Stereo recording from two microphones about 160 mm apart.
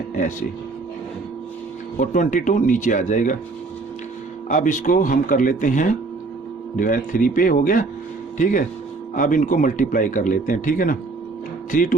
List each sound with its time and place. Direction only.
0.2 s speech: 50° left (ahead or behind)
2.0 s speech: 55° left (ahead or behind)
4.4 s speech: 50° left (ahead or behind)